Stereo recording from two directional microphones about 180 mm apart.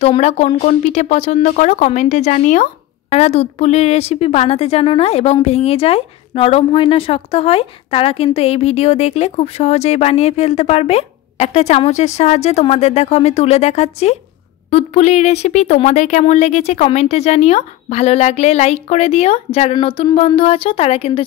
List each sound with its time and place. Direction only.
0.0 s speech: 35° left (ahead or behind)